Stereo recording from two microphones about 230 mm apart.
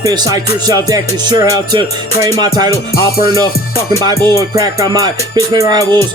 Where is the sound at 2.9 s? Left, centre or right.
Left.